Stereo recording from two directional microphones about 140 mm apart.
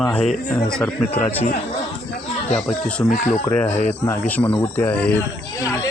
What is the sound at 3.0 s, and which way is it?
Speech, 65° left (ahead or behind).